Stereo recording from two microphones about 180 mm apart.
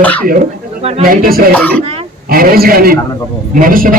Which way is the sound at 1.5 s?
10° left (ahead or behind).